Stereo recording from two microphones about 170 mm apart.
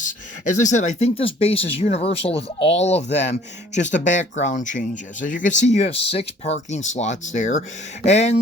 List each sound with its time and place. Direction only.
0.0 s speech: 45° left (ahead or behind)